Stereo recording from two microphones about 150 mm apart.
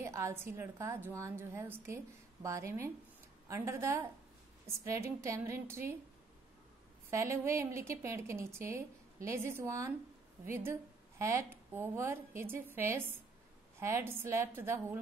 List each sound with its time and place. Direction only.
0.0 s a woman's voice: 20° right (ahead or behind)
7.1 s a woman's voice: 20° right (ahead or behind)